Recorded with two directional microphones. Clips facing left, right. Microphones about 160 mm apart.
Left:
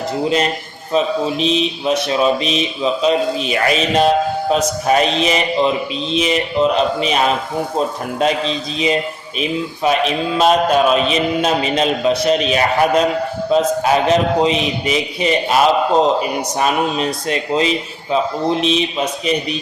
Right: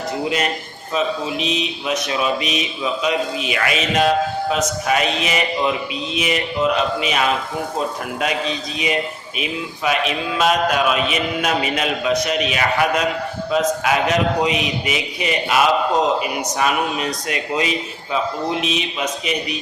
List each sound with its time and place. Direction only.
0.9 s speech: 30° left (ahead or behind)
10.3 s speech: 30° left (ahead or behind)